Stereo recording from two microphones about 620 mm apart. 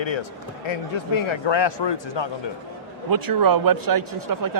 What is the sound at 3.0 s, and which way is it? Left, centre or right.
A man's voice, right.